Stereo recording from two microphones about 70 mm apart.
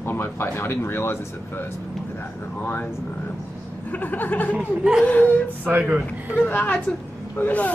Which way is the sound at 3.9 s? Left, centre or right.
Left.